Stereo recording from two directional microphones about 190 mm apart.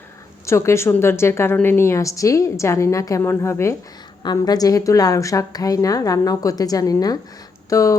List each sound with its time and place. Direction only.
0.4 s a woman's voice: 15° left (ahead or behind)